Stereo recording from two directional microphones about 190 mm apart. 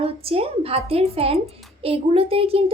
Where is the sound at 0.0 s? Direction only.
30° right (ahead or behind).